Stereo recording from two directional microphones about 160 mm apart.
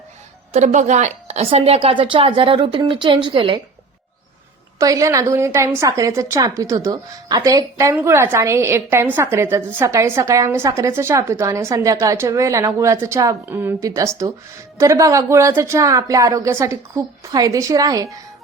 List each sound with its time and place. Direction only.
0.5 s a woman's voice: 45° right (ahead or behind); by 3.6 s 30° right (ahead or behind)
4.8 s a woman's voice: 20° right (ahead or behind)